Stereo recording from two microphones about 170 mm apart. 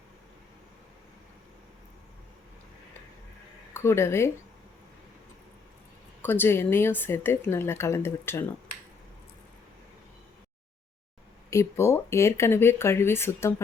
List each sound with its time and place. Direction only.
3.8 s speech: 15° left (ahead or behind)
6.2 s speech: 10° left (ahead or behind)
11.5 s speech: 15° left (ahead or behind)